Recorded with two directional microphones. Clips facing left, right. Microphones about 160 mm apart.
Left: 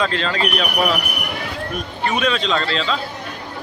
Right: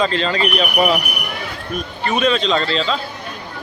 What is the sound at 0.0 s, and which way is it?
Speech, centre (ahead or behind).